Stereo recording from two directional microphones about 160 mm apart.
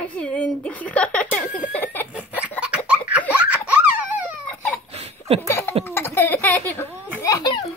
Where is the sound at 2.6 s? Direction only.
5° right (ahead or behind).